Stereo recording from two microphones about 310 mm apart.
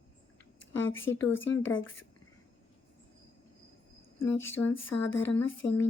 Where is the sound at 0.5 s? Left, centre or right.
Left.